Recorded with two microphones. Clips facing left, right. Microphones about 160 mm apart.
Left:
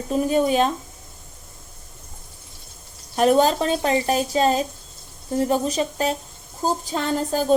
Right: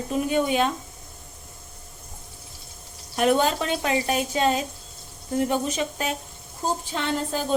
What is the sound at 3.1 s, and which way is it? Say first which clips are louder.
A woman's voice: left 4 dB; 35° left (ahead or behind).